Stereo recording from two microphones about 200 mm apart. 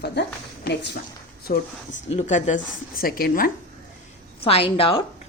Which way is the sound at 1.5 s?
40° left (ahead or behind).